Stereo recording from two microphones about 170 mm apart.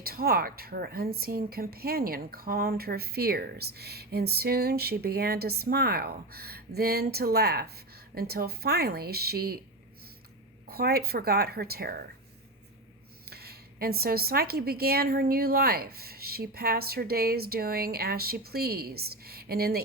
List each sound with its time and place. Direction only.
0.0 s a woman's voice: 60° right (ahead or behind)
10.7 s a woman's voice: 65° right (ahead or behind)
13.3 s a woman's voice: 65° right (ahead or behind)